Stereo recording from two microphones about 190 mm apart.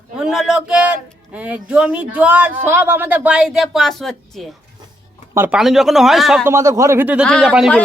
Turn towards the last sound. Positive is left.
turn(degrees=0)  # may be behind; listen again after turning